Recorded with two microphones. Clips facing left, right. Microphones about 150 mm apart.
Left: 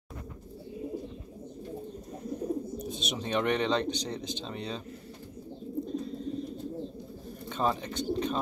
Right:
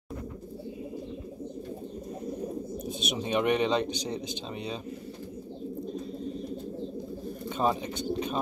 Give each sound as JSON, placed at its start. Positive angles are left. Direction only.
{"t": 2.8, "sound": "speech", "side_deg": -10}
{"t": 7.4, "sound": "speech", "side_deg": -10}